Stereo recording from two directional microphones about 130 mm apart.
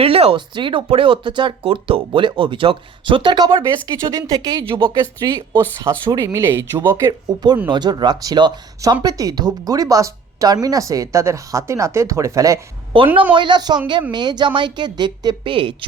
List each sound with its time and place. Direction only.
0.0 s speech: 45° right (ahead or behind); by 4.6 s 30° right (ahead or behind)
4.6 s speech: 40° right (ahead or behind); by 12.5 s 25° right (ahead or behind)
12.9 s speech: 40° right (ahead or behind)